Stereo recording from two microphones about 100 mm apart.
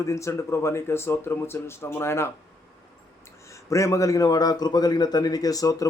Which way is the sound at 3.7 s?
30° left (ahead or behind).